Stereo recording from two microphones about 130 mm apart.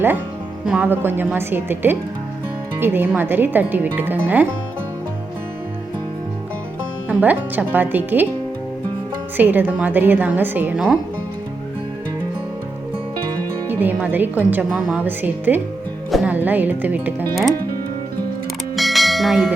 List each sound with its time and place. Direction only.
0.6 s speech: 10° right (ahead or behind)
7.1 s speech: 10° right (ahead or behind)
9.4 s speech: 15° right (ahead or behind)
13.7 s speech: 15° right (ahead or behind)
14.7 s a woman's voice: centre (ahead or behind)
15.0 s speech: 15° right (ahead or behind)
18.8 s bell: centre (ahead or behind)